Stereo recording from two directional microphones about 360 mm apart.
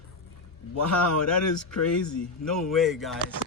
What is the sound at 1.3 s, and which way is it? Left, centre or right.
Speech, left.